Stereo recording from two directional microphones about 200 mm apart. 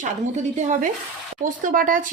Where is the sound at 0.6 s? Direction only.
40° right (ahead or behind).